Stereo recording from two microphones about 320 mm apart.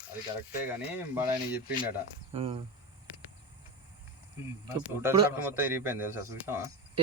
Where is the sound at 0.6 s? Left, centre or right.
Centre.